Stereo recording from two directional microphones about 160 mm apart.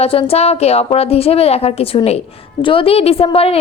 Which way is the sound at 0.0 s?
35° left (ahead or behind).